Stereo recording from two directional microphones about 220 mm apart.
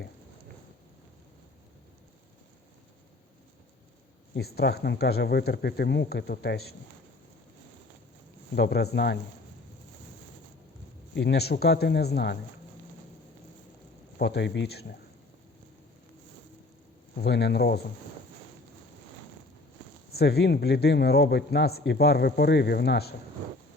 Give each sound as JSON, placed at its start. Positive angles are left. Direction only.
{"t": 4.4, "sound": "a man's voice", "side_deg": 45}
{"t": 8.5, "sound": "a man's voice", "side_deg": 50}
{"t": 11.1, "sound": "a man's voice", "side_deg": 50}
{"t": 14.2, "sound": "a man's voice", "side_deg": 50}
{"t": 17.2, "sound": "a man's voice", "side_deg": 50}
{"t": 20.1, "sound": "a man's voice", "side_deg": 45}